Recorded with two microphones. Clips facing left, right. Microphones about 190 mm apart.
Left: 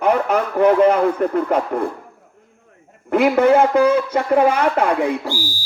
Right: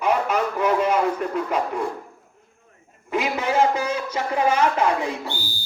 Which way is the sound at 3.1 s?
60° left (ahead or behind).